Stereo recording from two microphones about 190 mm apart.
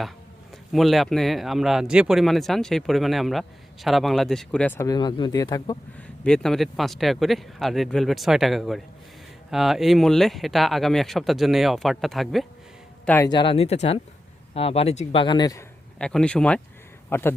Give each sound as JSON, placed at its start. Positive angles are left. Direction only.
{"t": 0.7, "sound": "speech", "side_deg": 0}
{"t": 6.0, "sound": "speech", "side_deg": 5}
{"t": 13.1, "sound": "speech", "side_deg": 10}
{"t": 13.3, "sound": "speech", "side_deg": 25}
{"t": 16.0, "sound": "a man's voice", "side_deg": 5}